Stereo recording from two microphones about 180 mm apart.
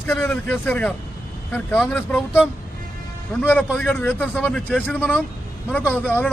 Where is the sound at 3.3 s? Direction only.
10° left (ahead or behind).